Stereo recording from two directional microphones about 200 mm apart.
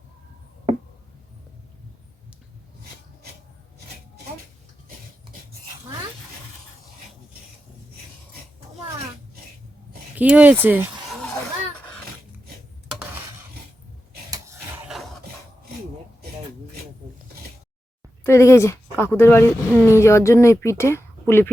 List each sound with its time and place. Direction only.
10.2 s speech: 10° right (ahead or behind)
14.3 s a sound: 15° right (ahead or behind)
18.2 s a woman's voice: 15° left (ahead or behind)